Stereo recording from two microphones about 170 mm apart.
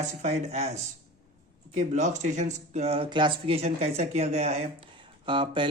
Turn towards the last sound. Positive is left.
turn(degrees=-30)  # may be behind; listen again after turning